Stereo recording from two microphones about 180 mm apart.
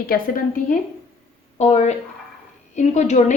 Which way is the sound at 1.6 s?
40° left (ahead or behind).